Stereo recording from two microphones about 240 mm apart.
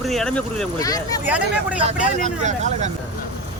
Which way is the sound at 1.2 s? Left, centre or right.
Centre.